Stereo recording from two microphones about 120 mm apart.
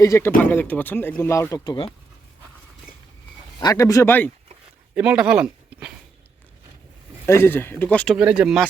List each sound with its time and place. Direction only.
0.0 s a man's voice: 25° left (ahead or behind)
0.3 s speech: 15° left (ahead or behind)
1.6 s speech: 40° left (ahead or behind)
3.6 s a man's voice: 30° left (ahead or behind)
4.9 s speech: 10° right (ahead or behind)
7.3 s speech: 20° left (ahead or behind)
8.1 s speech: 10° right (ahead or behind)